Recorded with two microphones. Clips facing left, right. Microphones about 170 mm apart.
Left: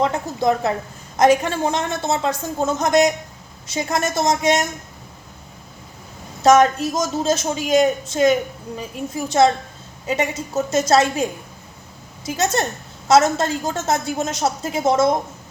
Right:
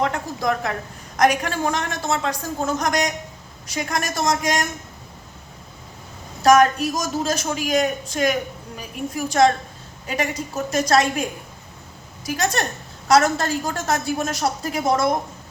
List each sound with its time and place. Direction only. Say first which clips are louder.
0.0 s a woman's voice: left 4 dB; 25° left (ahead or behind)
6.4 s a woman's voice: left 1 dB; 25° left (ahead or behind)